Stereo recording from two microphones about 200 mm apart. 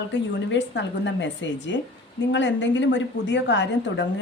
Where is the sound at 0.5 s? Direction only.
65° left (ahead or behind).